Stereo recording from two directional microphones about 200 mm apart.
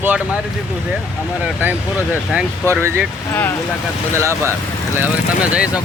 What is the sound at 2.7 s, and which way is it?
Speech, 10° right (ahead or behind).